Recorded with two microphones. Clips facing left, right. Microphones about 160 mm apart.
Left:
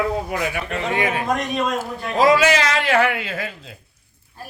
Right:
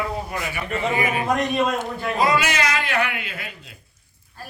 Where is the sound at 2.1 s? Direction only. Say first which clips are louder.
Left 6 dB; 90° left.